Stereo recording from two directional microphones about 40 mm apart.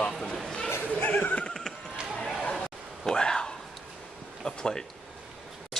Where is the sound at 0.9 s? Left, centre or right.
Left.